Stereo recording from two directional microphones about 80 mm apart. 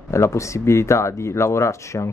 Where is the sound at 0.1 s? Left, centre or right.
Left.